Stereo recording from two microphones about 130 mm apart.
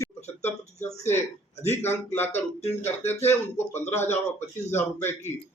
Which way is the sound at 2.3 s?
55° left (ahead or behind).